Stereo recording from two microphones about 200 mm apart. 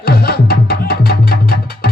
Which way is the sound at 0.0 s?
50° left (ahead or behind).